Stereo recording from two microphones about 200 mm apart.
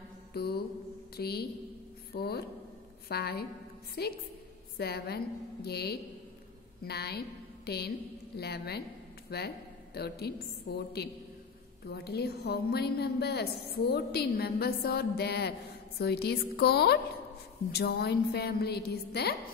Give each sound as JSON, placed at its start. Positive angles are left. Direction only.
{"t": 0.3, "sound": "mantra", "side_deg": 50}
{"t": 1.1, "sound": "a woman's voice", "side_deg": 50}